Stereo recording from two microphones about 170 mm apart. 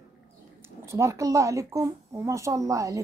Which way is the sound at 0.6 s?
15° right (ahead or behind).